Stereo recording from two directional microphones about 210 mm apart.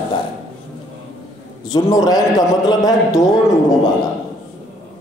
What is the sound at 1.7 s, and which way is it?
A man's voice, 15° left (ahead or behind).